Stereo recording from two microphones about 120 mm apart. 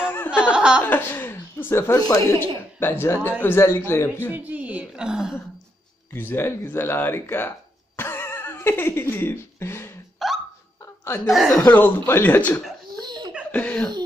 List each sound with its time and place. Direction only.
0.0 s laughter: 20° left (ahead or behind)
0.3 s a woman's voice: 10° right (ahead or behind)
0.8 s speech: 15° left (ahead or behind)
2.0 s speech: 30° left (ahead or behind)
2.3 s a man's voice: 15° left (ahead or behind)
4.3 s a woman's voice: 15° right (ahead or behind)
6.1 s speech: 20° left (ahead or behind)
10.1 s hiccup: centre (ahead or behind)
11.2 s speech: centre (ahead or behind)
12.1 s speech: 15° left (ahead or behind)
12.8 s laughter: 35° right (ahead or behind)
13.5 s speech: 10° left (ahead or behind)